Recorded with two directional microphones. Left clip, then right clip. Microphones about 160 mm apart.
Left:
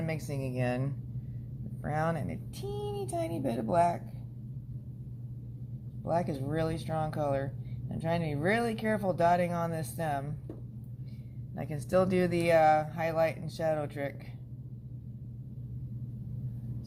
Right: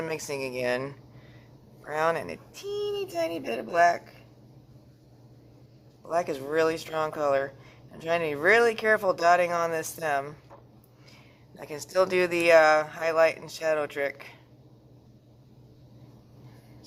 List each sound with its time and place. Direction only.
0.0 s speech: 30° right (ahead or behind)
6.1 s speech: 35° right (ahead or behind)
11.7 s speech: 25° right (ahead or behind)